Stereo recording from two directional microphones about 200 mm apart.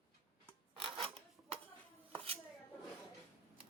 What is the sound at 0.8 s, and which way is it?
Filing, 25° right (ahead or behind).